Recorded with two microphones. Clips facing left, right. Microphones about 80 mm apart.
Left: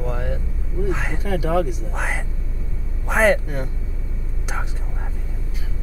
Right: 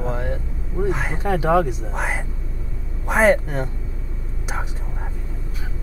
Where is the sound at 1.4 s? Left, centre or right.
Right.